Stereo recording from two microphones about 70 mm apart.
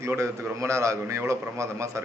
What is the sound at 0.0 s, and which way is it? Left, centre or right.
A man's voice, right.